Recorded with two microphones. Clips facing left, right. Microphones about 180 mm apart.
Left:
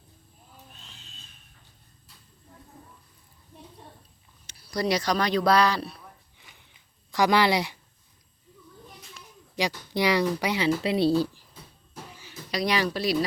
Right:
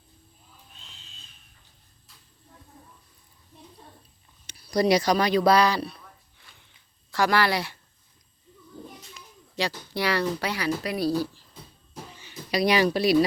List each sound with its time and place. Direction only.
4.4 s speech: 15° right (ahead or behind); by 6.0 s centre (ahead or behind)
6.4 s a sound: 15° left (ahead or behind)
7.1 s speech: 15° left (ahead or behind)
9.6 s speech: 15° left (ahead or behind)
12.1 s a sound: 5° left (ahead or behind)
12.5 s speech: 10° right (ahead or behind)